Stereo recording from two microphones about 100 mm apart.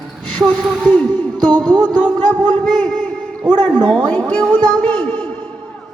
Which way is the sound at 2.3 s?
5° right (ahead or behind).